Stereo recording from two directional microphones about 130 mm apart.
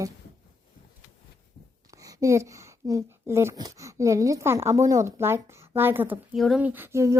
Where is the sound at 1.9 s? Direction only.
25° right (ahead or behind).